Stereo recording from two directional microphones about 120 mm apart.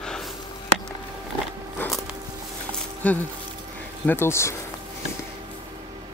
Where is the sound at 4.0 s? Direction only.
20° left (ahead or behind).